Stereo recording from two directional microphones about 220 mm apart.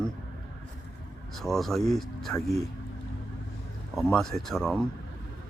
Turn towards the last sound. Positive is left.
turn(degrees=0)  # may be behind; listen again after turning